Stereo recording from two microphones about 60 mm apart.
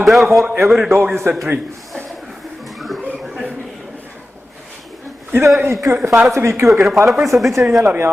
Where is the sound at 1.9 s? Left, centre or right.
Centre.